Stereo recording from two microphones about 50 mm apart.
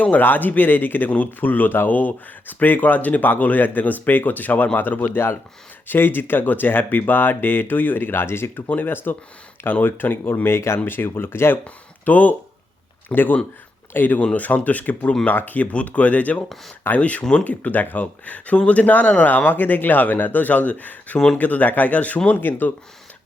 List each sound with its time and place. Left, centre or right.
0.0 s speech: left
11.6 s speech: left
22.3 s speech: left